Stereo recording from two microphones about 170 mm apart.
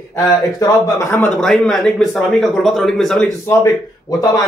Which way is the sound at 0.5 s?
20° left (ahead or behind).